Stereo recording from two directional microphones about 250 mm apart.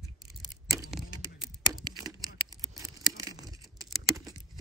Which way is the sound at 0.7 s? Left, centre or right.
Centre.